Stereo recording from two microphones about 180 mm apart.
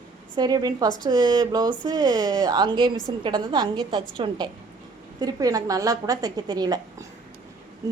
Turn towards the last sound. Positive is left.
turn(degrees=-20)  # may be behind; listen again after turning